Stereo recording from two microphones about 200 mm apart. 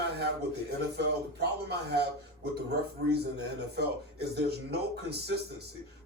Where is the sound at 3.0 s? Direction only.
55° right (ahead or behind).